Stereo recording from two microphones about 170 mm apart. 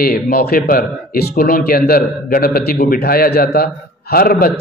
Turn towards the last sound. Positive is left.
turn(degrees=60)  # may be behind; listen again after turning